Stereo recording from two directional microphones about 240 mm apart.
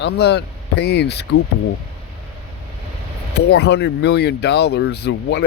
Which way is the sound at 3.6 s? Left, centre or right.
Left.